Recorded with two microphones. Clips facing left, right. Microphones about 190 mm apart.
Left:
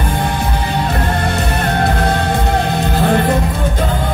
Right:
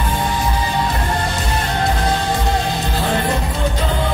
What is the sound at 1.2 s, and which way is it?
Music, 60° left (ahead or behind).